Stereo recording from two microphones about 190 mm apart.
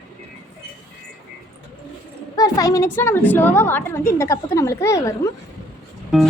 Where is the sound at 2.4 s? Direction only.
20° left (ahead or behind).